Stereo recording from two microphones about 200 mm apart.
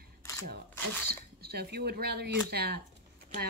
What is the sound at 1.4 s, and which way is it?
Speech, 50° right (ahead or behind).